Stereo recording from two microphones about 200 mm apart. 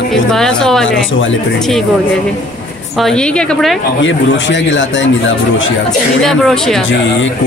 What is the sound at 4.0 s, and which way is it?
A man's voice, 65° left (ahead or behind).